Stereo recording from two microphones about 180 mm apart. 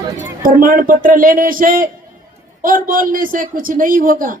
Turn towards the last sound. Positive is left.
turn(degrees=-50)  # may be behind; listen again after turning